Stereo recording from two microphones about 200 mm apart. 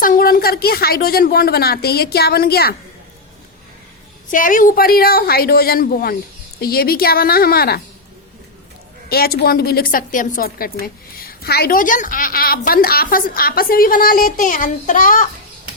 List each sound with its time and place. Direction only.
0.0 s a woman's voice: 45° left (ahead or behind)
4.3 s a woman's voice: 40° left (ahead or behind)
9.0 s a woman's voice: 50° left (ahead or behind)